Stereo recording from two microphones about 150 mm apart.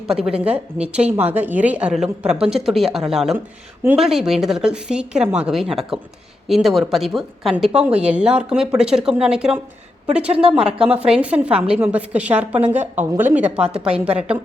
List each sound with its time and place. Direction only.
0.1 s a woman's voice: 5° right (ahead or behind)
10.2 s a woman's voice: 40° right (ahead or behind)
10.5 s a woman's voice: 5° right (ahead or behind)